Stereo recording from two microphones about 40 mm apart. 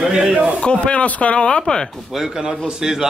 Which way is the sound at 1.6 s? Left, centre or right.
Centre.